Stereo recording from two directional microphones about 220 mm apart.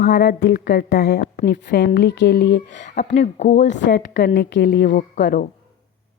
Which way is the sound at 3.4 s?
50° left (ahead or behind).